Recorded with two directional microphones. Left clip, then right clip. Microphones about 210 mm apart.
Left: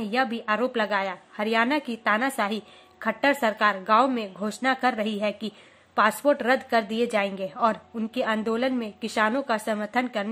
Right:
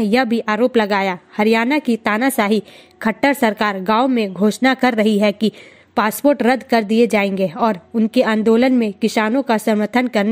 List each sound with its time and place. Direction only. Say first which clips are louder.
0.0 s a woman's voice: right 9 dB; 40° right (ahead or behind)